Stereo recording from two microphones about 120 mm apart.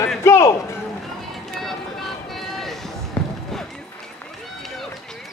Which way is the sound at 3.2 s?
10° left (ahead or behind).